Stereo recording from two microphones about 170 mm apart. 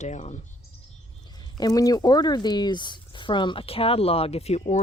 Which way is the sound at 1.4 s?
20° left (ahead or behind).